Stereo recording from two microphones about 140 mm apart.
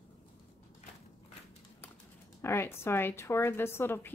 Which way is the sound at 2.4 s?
20° left (ahead or behind).